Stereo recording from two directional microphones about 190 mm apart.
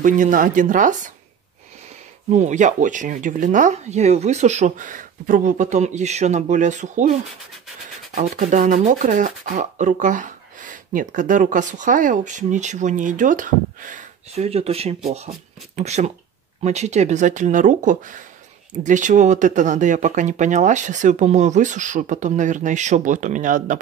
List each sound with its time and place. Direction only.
0.0 s speech: 45° right (ahead or behind)
2.3 s speech: 40° right (ahead or behind)